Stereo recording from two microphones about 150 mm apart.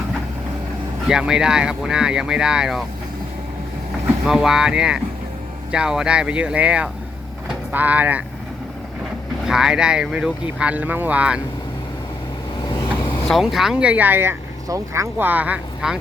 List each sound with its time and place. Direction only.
1.0 s speech: 5° right (ahead or behind)
4.3 s speech: 5° right (ahead or behind)
9.5 s speech: 5° right (ahead or behind)
12.6 s vehicle: 30° left (ahead or behind)
13.2 s speech: centre (ahead or behind)